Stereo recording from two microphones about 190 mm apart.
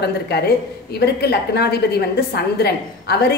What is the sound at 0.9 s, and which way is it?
A woman's voice, 60° left (ahead or behind).